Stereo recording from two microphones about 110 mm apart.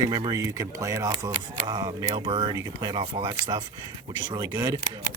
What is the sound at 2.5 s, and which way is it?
Speech, 35° right (ahead or behind).